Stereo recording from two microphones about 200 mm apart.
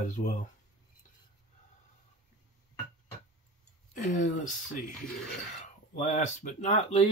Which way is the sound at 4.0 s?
40° left (ahead or behind).